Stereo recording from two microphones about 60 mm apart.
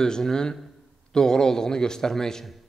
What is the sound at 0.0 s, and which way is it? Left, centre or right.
A man's voice, centre.